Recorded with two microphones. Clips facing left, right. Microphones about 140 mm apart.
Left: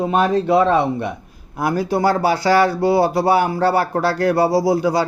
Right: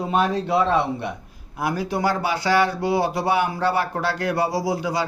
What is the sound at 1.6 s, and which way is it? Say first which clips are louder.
Speech: left 5 dB; 40° left (ahead or behind).